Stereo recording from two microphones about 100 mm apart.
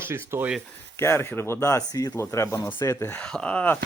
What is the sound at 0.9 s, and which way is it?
Speech, 25° left (ahead or behind).